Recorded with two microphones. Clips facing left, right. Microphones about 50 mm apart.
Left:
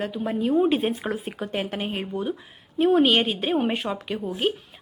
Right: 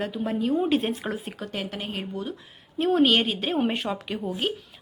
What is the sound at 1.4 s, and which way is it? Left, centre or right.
Speech, left.